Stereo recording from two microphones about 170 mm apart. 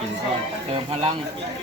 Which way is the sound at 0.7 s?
30° right (ahead or behind).